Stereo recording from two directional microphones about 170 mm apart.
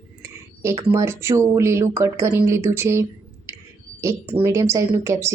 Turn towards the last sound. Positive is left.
turn(degrees=-15)  # may be behind; listen again after turning